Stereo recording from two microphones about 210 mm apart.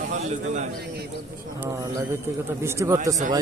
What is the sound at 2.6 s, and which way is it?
Speech, 15° right (ahead or behind).